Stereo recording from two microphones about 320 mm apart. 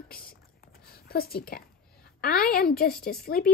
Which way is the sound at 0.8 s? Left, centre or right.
Left.